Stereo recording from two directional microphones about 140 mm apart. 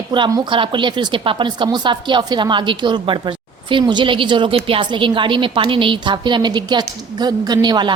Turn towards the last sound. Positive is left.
turn(degrees=-30)  # may be behind; listen again after turning